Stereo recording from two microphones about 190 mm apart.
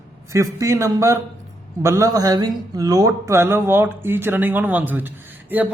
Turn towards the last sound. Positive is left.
turn(degrees=-10)  # may be behind; listen again after turning